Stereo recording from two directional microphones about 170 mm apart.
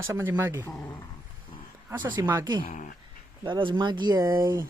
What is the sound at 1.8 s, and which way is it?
Speech, 10° right (ahead or behind).